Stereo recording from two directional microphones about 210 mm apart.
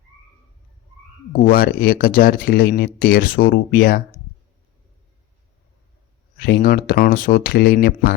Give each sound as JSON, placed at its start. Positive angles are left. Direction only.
{"t": 1.3, "sound": "speech", "side_deg": 45}
{"t": 6.4, "sound": "speech", "side_deg": 45}